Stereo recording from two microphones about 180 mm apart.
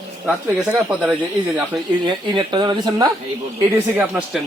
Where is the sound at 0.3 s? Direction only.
5° right (ahead or behind).